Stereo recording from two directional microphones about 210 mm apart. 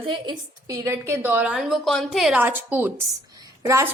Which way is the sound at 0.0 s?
20° right (ahead or behind).